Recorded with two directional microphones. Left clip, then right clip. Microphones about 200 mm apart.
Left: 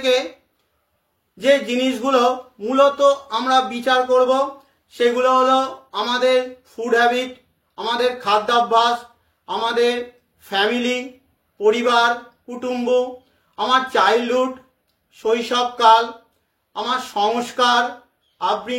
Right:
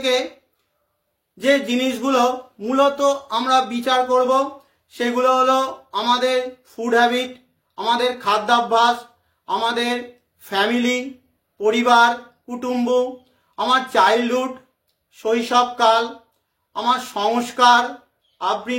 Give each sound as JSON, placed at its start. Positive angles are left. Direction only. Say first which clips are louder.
{"t": 0.0, "sound": "speech", "louder": "left 2 dB", "side_deg": -15}
{"t": 1.4, "sound": "a woman's voice", "louder": "left 1 dB", "side_deg": -15}